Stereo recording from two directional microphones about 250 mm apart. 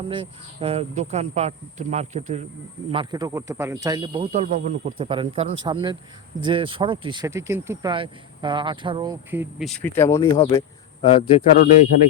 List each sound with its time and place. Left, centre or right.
0.1 s speech: right; by 11.4 s left